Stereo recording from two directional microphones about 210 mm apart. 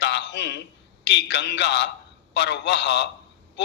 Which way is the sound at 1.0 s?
55° left (ahead or behind).